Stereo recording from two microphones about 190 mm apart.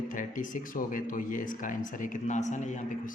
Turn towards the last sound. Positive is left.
turn(degrees=40)  # may be behind; listen again after turning